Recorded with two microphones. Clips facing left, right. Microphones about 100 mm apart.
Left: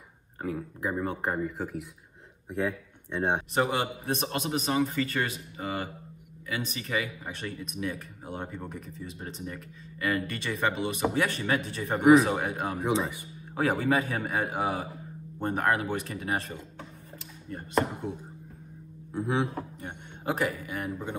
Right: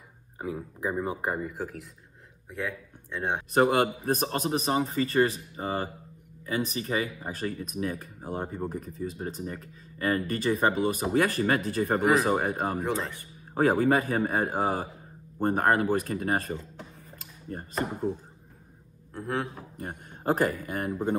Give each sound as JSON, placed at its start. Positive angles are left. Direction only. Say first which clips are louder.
{"t": 0.4, "sound": "speech", "louder": "even", "side_deg": -10}
{"t": 2.5, "sound": "speech", "louder": "left 4 dB", "side_deg": 20}
{"t": 3.5, "sound": "speech", "louder": "right 5 dB", "side_deg": -45}
{"t": 12.0, "sound": "a man's voice", "louder": "left 7 dB", "side_deg": 0}
{"t": 12.3, "sound": "speech", "louder": "right 3 dB", "side_deg": -40}
{"t": 12.8, "sound": "a man's voice", "louder": "left 2 dB", "side_deg": 0}
{"t": 13.6, "sound": "speech", "louder": "right 3 dB", "side_deg": -40}
{"t": 17.5, "sound": "speech", "louder": "left 4 dB", "side_deg": -35}
{"t": 19.1, "sound": "a man's voice", "louder": "left 3 dB", "side_deg": 0}
{"t": 19.8, "sound": "speech", "louder": "right 3 dB", "side_deg": -40}